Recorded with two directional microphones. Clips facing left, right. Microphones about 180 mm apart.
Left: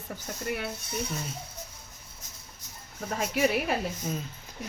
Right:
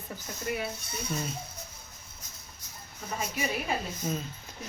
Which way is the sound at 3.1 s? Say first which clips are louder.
Left 6 dB; 75° left (ahead or behind).